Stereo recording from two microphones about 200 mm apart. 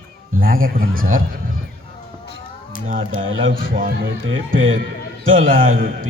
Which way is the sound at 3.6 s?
45° right (ahead or behind).